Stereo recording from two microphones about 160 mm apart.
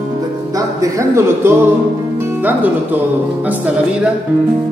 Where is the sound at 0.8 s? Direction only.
20° right (ahead or behind).